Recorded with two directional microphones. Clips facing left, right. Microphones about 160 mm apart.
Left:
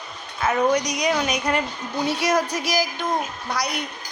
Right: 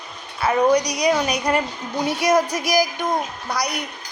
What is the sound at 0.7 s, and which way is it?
Speech, 35° right (ahead or behind).